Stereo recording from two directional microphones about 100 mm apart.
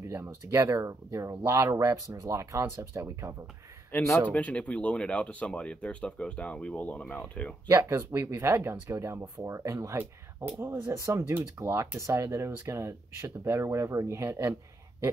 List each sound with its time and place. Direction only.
0.1 s speech: 30° right (ahead or behind)
4.3 s speech: 15° left (ahead or behind)
7.7 s speech: 25° right (ahead or behind)